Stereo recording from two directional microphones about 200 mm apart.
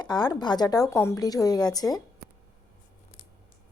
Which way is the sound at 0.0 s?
20° left (ahead or behind).